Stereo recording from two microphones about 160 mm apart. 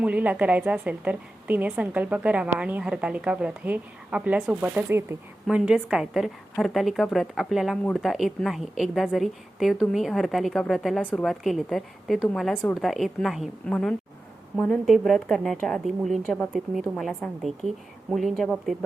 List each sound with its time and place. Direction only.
0.0 s a woman's voice: 10° right (ahead or behind)